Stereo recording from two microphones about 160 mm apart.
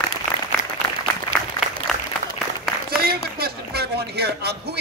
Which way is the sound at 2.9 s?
70° right (ahead or behind).